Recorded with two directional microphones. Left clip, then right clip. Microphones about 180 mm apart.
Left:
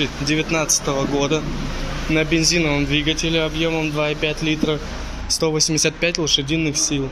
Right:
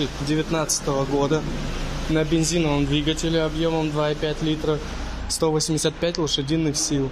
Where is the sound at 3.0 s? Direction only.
30° right (ahead or behind).